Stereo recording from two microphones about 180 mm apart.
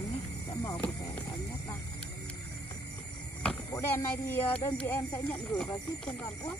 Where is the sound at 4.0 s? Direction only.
15° left (ahead or behind).